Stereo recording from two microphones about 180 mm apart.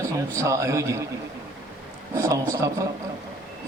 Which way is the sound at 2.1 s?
15° right (ahead or behind).